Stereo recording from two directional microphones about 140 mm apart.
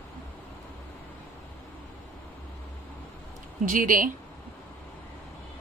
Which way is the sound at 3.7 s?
75° right (ahead or behind).